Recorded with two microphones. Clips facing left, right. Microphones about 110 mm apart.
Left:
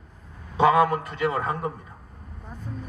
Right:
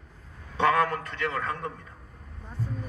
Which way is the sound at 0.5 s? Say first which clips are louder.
Left 5 dB; 10° left (ahead or behind).